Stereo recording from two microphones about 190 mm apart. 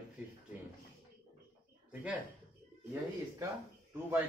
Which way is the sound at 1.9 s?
5° right (ahead or behind).